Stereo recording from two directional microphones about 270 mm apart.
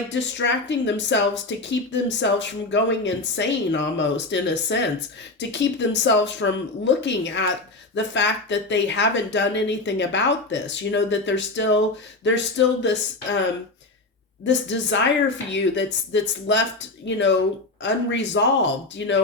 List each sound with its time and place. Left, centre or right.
0.1 s speech: left
14.4 s a woman's voice: left